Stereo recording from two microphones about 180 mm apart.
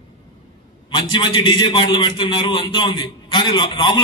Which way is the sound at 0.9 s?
25° left (ahead or behind).